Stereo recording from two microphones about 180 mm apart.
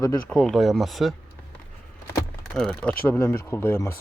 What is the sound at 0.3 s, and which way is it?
Speech, 5° left (ahead or behind).